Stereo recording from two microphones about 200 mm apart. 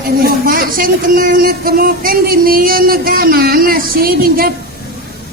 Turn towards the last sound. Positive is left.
turn(degrees=-45)  # may be behind; listen again after turning